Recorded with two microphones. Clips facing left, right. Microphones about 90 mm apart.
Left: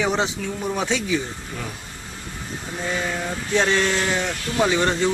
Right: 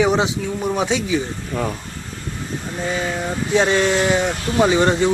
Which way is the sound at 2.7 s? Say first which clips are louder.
Right 2 dB; 5° right (ahead or behind).